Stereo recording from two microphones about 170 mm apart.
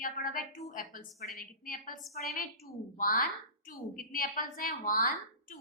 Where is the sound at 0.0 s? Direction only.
55° left (ahead or behind).